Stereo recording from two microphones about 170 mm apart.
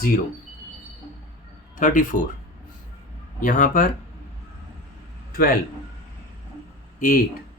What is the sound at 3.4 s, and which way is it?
Speech, 50° left (ahead or behind).